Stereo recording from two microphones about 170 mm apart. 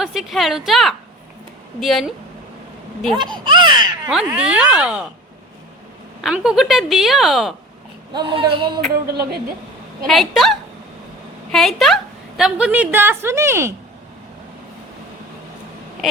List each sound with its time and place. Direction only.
0.0 s a woman's voice: centre (ahead or behind)
3.2 s speech: 25° right (ahead or behind)
4.1 s a woman's voice: 5° right (ahead or behind)
6.2 s a woman's voice: 5° right (ahead or behind)
8.1 s speech: 30° right (ahead or behind)
9.0 s a woman's voice: 70° right (ahead or behind)
10.1 s a woman's voice: centre (ahead or behind); by 13.7 s 15° right (ahead or behind)